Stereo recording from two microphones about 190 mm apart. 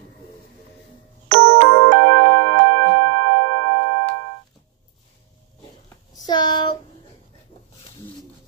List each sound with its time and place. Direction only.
1.3 s music: 65° right (ahead or behind); by 4.0 s 85° right
6.1 s child singing: 20° left (ahead or behind)